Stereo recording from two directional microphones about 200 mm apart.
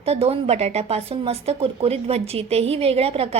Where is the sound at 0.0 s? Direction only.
30° right (ahead or behind).